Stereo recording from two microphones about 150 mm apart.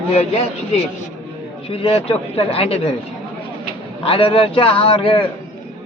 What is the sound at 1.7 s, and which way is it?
A man's voice, 40° left (ahead or behind).